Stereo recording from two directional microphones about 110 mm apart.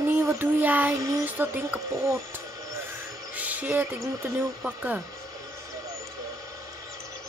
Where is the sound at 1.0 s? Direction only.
30° right (ahead or behind).